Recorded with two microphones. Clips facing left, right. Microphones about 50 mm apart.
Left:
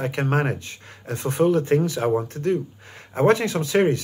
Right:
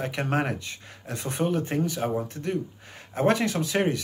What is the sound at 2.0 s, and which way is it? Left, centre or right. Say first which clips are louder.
Speech: left 6 dB; left.